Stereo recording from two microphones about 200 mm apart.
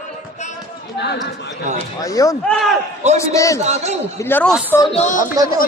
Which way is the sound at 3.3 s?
15° left (ahead or behind).